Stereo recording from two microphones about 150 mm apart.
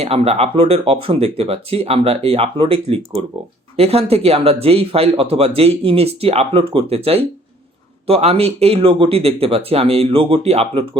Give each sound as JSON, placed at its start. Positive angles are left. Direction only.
{"t": 0.0, "sound": "speech", "side_deg": -40}